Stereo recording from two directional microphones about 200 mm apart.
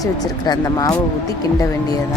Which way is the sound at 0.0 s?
20° left (ahead or behind).